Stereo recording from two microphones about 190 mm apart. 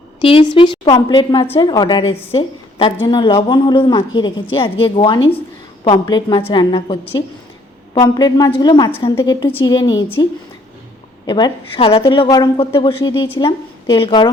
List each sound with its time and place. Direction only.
0.2 s a woman's voice: 25° left (ahead or behind)
11.3 s a woman's voice: 20° left (ahead or behind)